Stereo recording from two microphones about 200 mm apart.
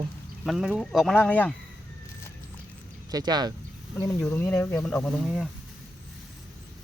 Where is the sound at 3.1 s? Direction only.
20° right (ahead or behind).